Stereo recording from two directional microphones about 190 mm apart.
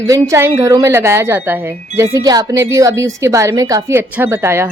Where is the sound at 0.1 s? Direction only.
15° right (ahead or behind).